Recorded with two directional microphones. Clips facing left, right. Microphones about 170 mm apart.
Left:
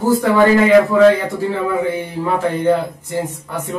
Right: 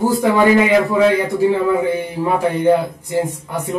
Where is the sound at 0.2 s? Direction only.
15° right (ahead or behind).